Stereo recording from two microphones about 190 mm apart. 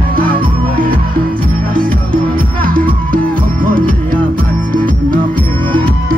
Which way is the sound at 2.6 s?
45° right (ahead or behind).